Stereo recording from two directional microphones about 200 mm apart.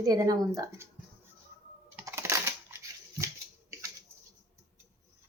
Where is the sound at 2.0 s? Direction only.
15° right (ahead or behind).